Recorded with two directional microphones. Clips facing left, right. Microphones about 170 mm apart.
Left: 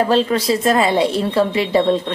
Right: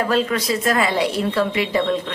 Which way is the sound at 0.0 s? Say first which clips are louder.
Left 4 dB; 30° left (ahead or behind).